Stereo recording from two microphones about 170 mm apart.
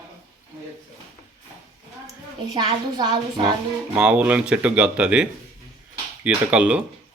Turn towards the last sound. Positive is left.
turn(degrees=-5)  # may be behind; listen again after turning